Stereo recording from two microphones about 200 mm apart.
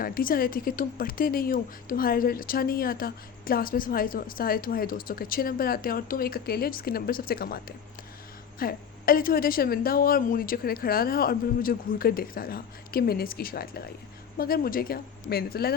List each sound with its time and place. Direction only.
0.0 s speech: 45° left (ahead or behind)